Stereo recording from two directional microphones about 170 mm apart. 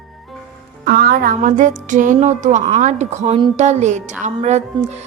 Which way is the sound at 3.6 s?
40° right (ahead or behind).